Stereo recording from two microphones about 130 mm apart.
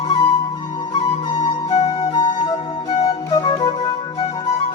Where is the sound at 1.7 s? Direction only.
40° left (ahead or behind).